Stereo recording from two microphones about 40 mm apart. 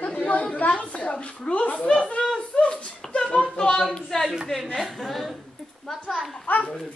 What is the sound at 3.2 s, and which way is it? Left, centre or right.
Speech, left.